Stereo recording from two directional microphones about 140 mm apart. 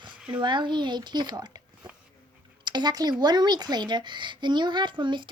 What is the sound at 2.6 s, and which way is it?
A woman's voice, 30° right (ahead or behind).